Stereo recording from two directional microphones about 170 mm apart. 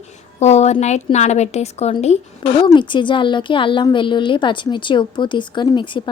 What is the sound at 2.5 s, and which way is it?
A woman's voice, 30° left (ahead or behind).